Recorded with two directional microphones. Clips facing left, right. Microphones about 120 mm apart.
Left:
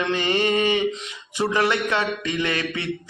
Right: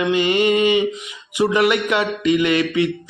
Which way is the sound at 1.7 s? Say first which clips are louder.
Right 4 dB; 15° right (ahead or behind).